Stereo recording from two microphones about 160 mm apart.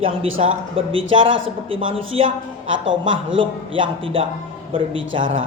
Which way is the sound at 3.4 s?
35° right (ahead or behind).